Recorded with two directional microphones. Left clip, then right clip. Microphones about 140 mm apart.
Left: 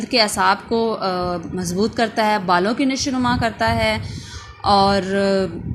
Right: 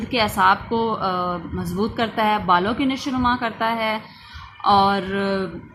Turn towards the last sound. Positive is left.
turn(degrees=25)  # may be behind; listen again after turning